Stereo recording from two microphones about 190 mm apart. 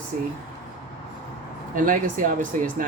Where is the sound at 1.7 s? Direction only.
45° right (ahead or behind).